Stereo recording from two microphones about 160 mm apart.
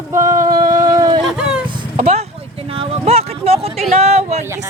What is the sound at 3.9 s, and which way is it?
Speech, 45° right (ahead or behind).